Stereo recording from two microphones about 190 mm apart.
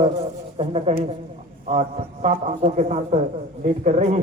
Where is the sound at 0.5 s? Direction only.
30° right (ahead or behind).